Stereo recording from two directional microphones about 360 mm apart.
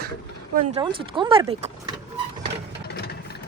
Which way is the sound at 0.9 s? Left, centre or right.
Centre.